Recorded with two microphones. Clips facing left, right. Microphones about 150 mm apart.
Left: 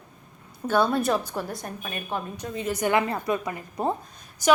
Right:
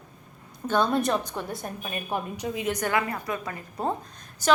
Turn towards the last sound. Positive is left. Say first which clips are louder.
# left 2 dB
turn(degrees=10)  # may be behind; listen again after turning